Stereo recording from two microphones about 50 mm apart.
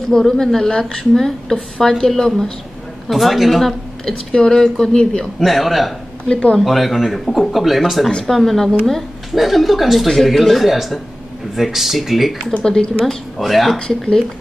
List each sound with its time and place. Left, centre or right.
0.1 s a woman's voice: centre
3.1 s a woman's voice: centre
4.3 s a woman's voice: centre
5.4 s a woman's voice: centre
6.2 s speech: centre
6.6 s a woman's voice: centre
12.6 s a woman's voice: centre
13.0 s a woman's voice: centre
13.7 s a woman's voice: centre